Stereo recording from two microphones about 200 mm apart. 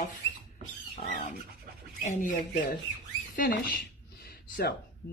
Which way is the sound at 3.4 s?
45° left (ahead or behind).